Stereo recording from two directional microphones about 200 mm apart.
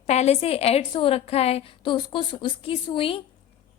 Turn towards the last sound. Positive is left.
turn(degrees=25)  # may be behind; listen again after turning